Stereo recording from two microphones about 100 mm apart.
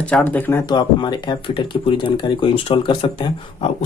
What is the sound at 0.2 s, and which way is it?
Speech, 20° left (ahead or behind).